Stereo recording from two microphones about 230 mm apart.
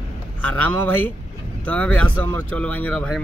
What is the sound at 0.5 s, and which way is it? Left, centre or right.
Speech, centre.